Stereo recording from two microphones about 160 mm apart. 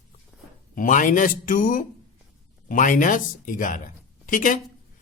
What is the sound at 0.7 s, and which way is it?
Speech, 55° left (ahead or behind).